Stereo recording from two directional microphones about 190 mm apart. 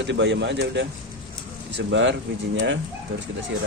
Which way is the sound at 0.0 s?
70° right (ahead or behind).